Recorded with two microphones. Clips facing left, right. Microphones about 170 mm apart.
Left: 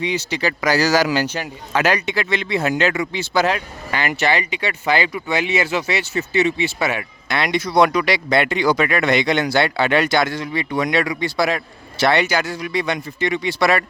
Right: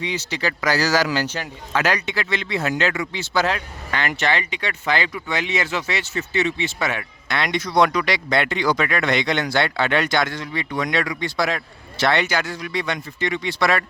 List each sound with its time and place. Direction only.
0.0 s a man's voice: 15° left (ahead or behind)